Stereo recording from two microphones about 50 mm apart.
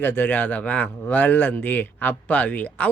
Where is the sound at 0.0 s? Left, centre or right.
Left.